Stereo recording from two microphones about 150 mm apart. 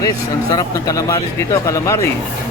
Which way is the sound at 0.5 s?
25° left (ahead or behind).